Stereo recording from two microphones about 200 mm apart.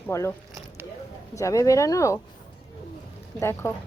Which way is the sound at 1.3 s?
15° left (ahead or behind).